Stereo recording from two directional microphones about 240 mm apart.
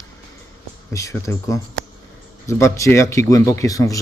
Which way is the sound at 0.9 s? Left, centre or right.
Centre.